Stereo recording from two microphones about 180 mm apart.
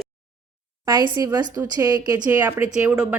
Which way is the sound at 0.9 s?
20° right (ahead or behind).